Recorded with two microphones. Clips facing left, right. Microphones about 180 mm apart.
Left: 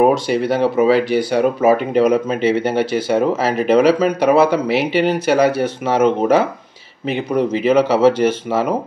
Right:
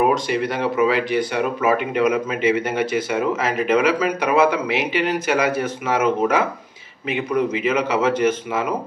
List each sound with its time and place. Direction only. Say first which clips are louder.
0.0 s speech: left 5 dB; 35° left (ahead or behind)